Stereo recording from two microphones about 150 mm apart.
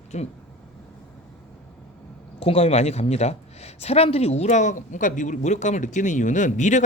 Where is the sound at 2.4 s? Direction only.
45° left (ahead or behind).